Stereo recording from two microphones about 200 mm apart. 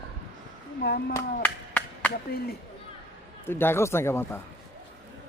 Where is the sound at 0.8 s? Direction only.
55° left (ahead or behind).